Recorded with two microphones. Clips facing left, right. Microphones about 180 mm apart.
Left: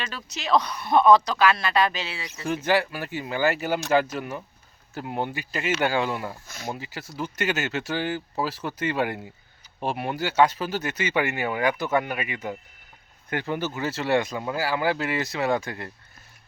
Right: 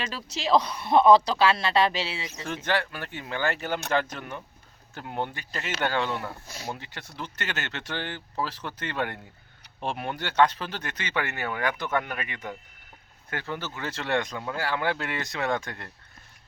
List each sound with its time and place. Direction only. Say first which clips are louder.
0.0 s speech: right 2 dB; 30° right (ahead or behind)
2.4 s speech: left 6 dB; 10° left (ahead or behind)